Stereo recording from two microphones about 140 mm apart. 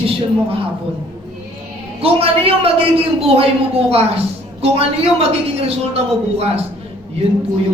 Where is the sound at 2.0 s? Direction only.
45° right (ahead or behind).